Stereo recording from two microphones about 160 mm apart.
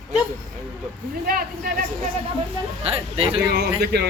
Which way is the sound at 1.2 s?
60° right (ahead or behind).